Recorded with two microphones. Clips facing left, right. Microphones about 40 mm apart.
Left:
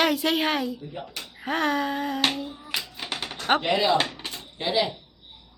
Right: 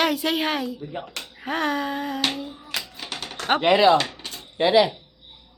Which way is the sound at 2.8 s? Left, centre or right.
Centre.